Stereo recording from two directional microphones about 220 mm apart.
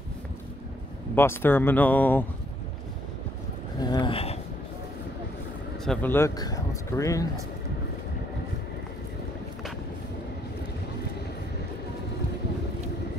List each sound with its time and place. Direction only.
1.1 s speech: 10° left (ahead or behind)
3.8 s a sound: 20° left (ahead or behind)
5.9 s speech: 10° left (ahead or behind)